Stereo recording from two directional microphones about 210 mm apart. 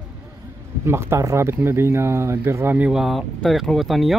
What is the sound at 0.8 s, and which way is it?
Speech, 10° right (ahead or behind).